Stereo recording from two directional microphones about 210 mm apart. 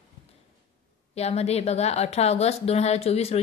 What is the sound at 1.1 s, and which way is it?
Speech, 30° left (ahead or behind).